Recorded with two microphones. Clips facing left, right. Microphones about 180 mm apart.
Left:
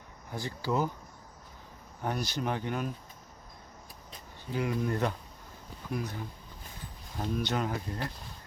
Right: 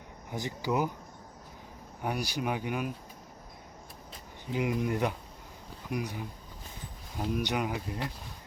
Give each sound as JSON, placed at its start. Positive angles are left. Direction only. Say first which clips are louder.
{"t": 0.3, "sound": "speech", "louder": "right 1 dB", "side_deg": -15}
{"t": 2.0, "sound": "speech", "louder": "even", "side_deg": -10}
{"t": 4.5, "sound": "speech", "louder": "right 1 dB", "side_deg": -15}